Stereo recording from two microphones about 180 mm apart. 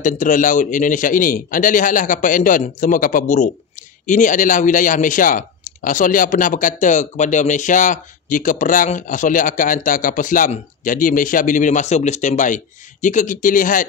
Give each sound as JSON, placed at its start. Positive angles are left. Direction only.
{"t": 0.0, "sound": "speech", "side_deg": 45}